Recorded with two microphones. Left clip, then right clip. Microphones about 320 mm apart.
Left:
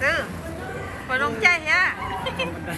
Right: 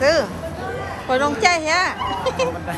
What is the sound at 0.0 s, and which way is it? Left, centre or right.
Speech, centre.